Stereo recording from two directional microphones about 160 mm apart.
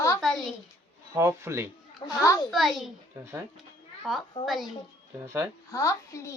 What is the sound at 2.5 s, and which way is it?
Speech, centre (ahead or behind).